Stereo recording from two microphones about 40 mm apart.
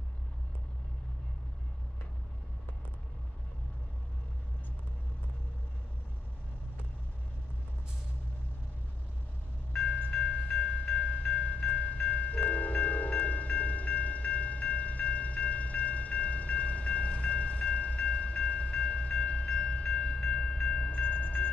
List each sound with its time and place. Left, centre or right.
10.1 s train: centre
12.1 s chime: left
18.2 s train: left; by 20.9 s centre
20.9 s a sound: left